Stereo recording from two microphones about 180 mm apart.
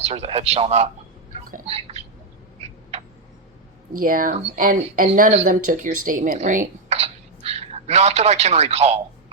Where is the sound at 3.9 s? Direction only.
50° right (ahead or behind).